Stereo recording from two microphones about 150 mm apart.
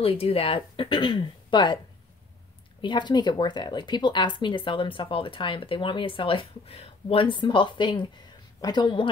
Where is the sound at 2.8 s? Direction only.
30° left (ahead or behind).